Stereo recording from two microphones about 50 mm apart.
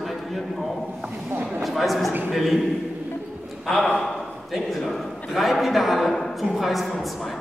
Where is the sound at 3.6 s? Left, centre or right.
Centre.